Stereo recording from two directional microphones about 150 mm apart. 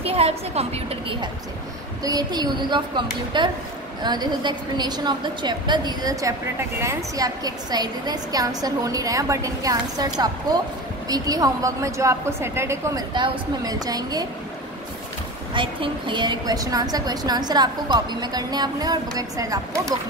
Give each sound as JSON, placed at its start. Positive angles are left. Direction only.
{"t": 0.0, "sound": "a woman's voice", "side_deg": -40}
{"t": 2.0, "sound": "a woman's voice", "side_deg": -25}
{"t": 13.1, "sound": "a woman's voice", "side_deg": -30}
{"t": 15.5, "sound": "a woman's voice", "side_deg": -35}